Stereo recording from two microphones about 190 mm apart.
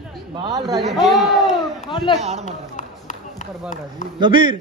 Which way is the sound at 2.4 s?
40° left (ahead or behind).